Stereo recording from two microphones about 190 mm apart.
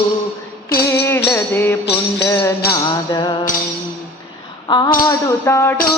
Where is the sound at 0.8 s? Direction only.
15° left (ahead or behind).